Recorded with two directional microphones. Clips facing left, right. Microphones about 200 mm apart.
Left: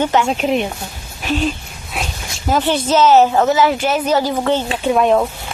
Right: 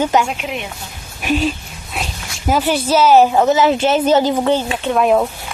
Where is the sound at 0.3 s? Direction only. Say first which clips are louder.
Left 8 dB; 35° left (ahead or behind).